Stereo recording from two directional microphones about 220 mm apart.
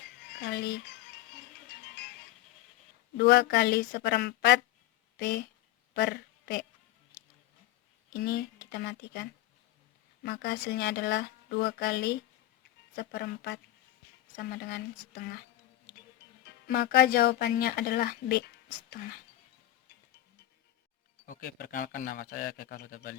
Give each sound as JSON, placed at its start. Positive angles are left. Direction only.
{"t": 0.3, "sound": "speech", "side_deg": 45}
{"t": 1.7, "sound": "music", "side_deg": 50}
{"t": 3.2, "sound": "a woman's voice", "side_deg": 45}
{"t": 8.1, "sound": "speech", "side_deg": 45}
{"t": 16.6, "sound": "speech", "side_deg": 45}
{"t": 21.2, "sound": "a man's voice", "side_deg": 40}